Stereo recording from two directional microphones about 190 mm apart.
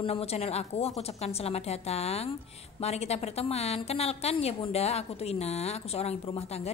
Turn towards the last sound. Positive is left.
turn(degrees=35)  # may be behind; listen again after turning